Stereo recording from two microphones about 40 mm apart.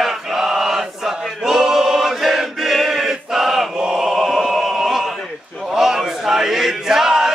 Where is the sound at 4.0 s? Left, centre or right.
Centre.